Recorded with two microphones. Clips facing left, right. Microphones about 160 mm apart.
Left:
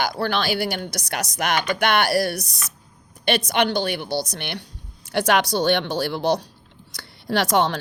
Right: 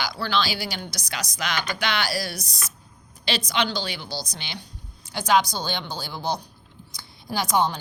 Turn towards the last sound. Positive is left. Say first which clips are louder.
# left 4 dB
turn(degrees=90)